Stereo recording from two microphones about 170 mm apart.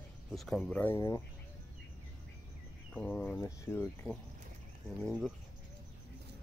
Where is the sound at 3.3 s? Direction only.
15° left (ahead or behind).